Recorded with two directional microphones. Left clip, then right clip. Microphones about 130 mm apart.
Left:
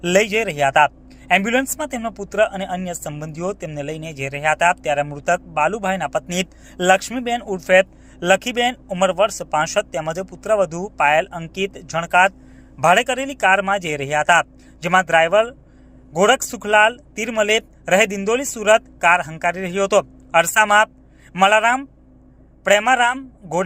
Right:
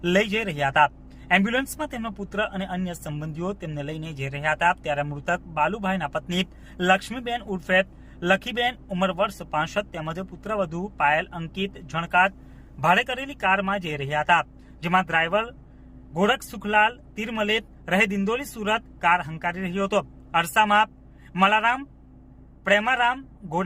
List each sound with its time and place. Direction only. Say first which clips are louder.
0.0 s speech: left 6 dB; 25° left (ahead or behind)